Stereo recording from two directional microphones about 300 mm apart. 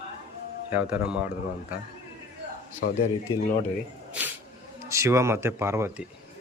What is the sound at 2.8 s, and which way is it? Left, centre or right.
Speech, left.